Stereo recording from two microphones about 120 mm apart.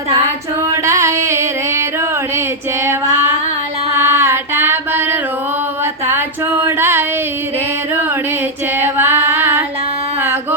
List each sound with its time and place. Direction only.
0.7 s a sound: 25° right (ahead or behind)
2.8 s female singing: 20° right (ahead or behind)
3.9 s music: 20° right (ahead or behind)
5.8 s female singing: 20° right (ahead or behind)
6.7 s a sound: 20° right (ahead or behind)
8.8 s female singing: 20° right (ahead or behind)